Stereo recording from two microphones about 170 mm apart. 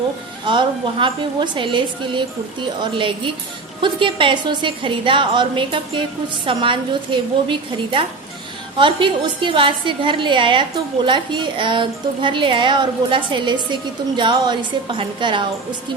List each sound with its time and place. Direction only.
0.4 s a woman's voice: 30° right (ahead or behind)